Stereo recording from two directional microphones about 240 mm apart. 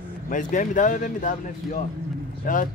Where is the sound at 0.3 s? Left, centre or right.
Left.